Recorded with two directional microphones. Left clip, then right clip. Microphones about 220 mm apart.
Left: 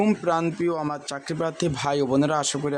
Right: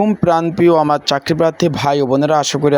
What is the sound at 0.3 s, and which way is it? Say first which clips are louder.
A man's voice: right 11 dB; 25° right (ahead or behind).